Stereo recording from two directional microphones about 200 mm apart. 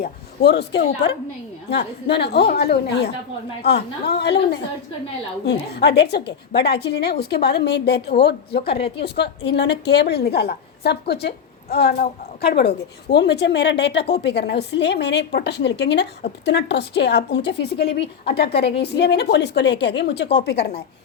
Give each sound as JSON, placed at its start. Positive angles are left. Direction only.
{"t": 0.0, "sound": "a man's voice", "side_deg": 55}